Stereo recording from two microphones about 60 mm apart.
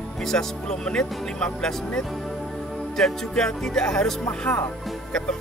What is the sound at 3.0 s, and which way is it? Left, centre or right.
Speech, centre.